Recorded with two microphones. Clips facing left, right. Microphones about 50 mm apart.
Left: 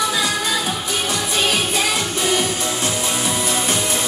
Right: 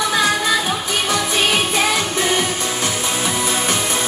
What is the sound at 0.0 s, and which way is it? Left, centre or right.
Music, right.